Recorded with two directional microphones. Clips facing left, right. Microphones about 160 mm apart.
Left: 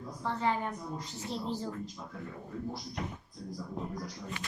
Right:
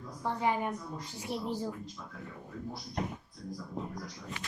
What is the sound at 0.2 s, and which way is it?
A woman's voice, 15° right (ahead or behind).